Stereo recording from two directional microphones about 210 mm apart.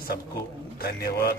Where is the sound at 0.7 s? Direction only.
45° left (ahead or behind).